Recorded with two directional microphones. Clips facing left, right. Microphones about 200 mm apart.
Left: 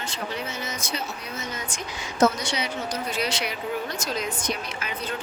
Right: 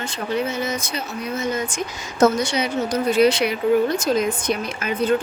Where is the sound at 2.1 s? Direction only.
45° right (ahead or behind).